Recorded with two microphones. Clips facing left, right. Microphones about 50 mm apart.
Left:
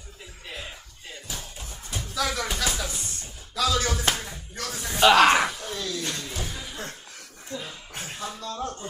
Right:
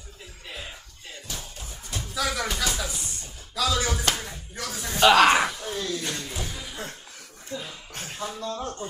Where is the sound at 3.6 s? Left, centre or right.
Centre.